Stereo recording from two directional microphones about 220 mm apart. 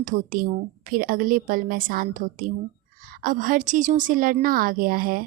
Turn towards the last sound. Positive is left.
turn(degrees=-40)  # may be behind; listen again after turning